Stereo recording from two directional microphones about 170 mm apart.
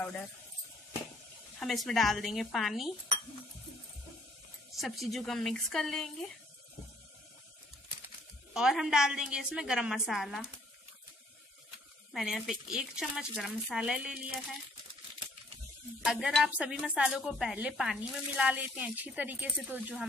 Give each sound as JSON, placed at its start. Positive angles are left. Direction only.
{"t": 1.6, "sound": "speech", "side_deg": 0}
{"t": 4.7, "sound": "speech", "side_deg": 0}
{"t": 8.5, "sound": "speech", "side_deg": -5}
{"t": 12.1, "sound": "speech", "side_deg": 0}
{"t": 16.0, "sound": "speech", "side_deg": -5}